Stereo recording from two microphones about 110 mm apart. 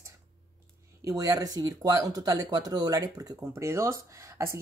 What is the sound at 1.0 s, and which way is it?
Speech, 35° right (ahead or behind).